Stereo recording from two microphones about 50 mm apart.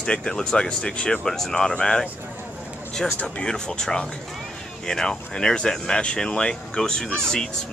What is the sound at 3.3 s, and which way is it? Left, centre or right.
Speech, centre.